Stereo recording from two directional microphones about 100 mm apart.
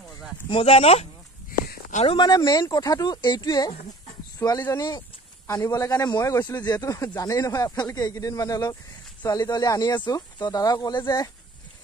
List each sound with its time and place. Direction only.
0.5 s speech: 65° left (ahead or behind); by 1.0 s 85° left
2.0 s speech: 50° left (ahead or behind)
5.5 s speech: 30° left (ahead or behind)
6.0 s speech: 45° left (ahead or behind)